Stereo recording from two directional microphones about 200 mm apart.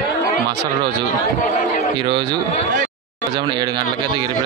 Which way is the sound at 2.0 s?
25° right (ahead or behind).